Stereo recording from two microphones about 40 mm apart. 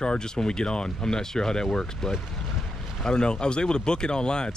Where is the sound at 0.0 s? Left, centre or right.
Centre.